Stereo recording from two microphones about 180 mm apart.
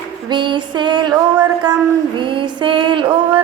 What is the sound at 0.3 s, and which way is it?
Music, 25° right (ahead or behind).